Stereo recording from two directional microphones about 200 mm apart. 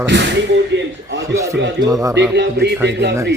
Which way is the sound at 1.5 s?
60° right (ahead or behind).